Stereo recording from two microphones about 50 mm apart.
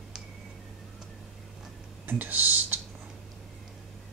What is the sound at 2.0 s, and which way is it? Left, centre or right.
Computer keyboard, right.